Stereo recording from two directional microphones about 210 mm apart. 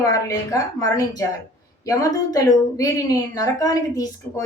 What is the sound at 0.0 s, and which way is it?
A woman's voice, 15° left (ahead or behind).